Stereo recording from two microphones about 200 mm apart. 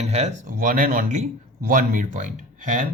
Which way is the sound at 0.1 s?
35° right (ahead or behind).